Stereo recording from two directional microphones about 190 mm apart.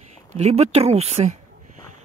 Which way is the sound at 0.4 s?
35° right (ahead or behind).